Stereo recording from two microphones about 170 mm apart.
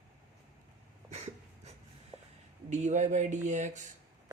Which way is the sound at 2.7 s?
45° right (ahead or behind).